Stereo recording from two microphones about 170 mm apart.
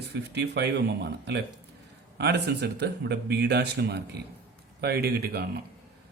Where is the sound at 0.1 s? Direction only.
80° right.